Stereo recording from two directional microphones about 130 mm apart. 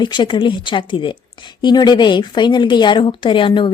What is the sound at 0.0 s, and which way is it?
A woman's voice, 35° left (ahead or behind).